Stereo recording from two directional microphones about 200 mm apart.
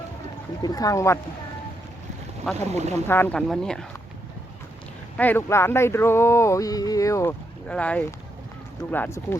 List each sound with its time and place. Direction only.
0.6 s speech: 20° left (ahead or behind)
2.6 s speech: 35° right (ahead or behind)
3.1 s speech: 10° left (ahead or behind)
5.1 s speech: 10° left (ahead or behind)